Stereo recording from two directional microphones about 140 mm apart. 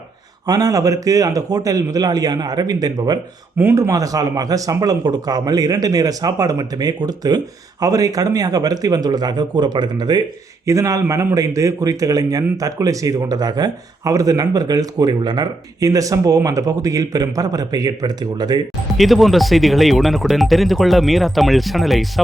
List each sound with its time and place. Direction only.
0.4 s speech: 25° right (ahead or behind)
18.9 s speech: centre (ahead or behind)